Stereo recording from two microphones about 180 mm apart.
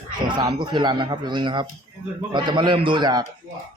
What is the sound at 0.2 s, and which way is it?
Speech, 25° right (ahead or behind).